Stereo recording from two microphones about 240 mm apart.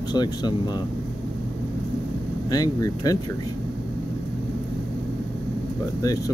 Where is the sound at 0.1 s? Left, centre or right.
Centre.